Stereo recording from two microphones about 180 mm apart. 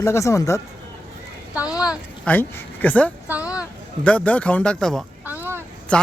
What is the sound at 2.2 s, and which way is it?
Speech, 10° left (ahead or behind).